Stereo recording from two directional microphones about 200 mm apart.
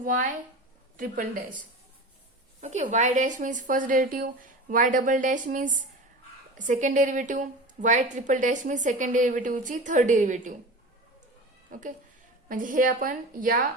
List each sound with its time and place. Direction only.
0.0 s a woman's voice: 40° right (ahead or behind)
11.7 s a woman's voice: 40° right (ahead or behind)